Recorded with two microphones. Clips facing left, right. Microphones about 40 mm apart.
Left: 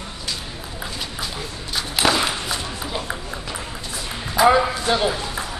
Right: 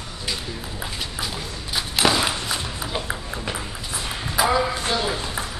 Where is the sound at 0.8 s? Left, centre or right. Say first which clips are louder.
Left 1 dB; centre.